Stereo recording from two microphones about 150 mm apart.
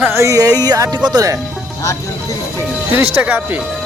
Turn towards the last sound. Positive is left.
turn(degrees=-10)  # may be behind; listen again after turning